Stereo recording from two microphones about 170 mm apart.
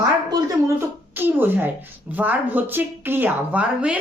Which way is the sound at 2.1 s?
10° right (ahead or behind).